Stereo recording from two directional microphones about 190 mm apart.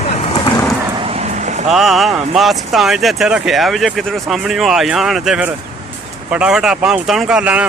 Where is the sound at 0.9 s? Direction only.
30° right (ahead or behind).